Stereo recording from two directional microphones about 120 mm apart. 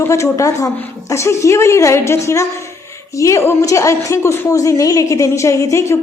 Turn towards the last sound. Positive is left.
turn(degrees=25)  # may be behind; listen again after turning